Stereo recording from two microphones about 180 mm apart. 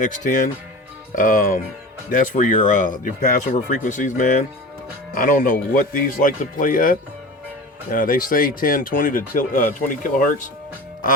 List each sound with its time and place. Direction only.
0.3 s speech: 45° left (ahead or behind)